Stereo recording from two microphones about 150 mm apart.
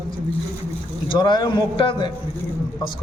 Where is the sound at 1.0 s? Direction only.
30° left (ahead or behind).